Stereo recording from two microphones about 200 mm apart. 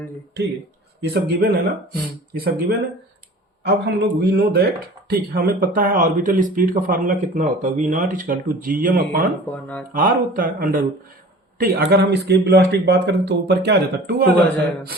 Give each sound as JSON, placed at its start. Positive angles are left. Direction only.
{"t": 1.0, "sound": "a man's voice", "side_deg": -55}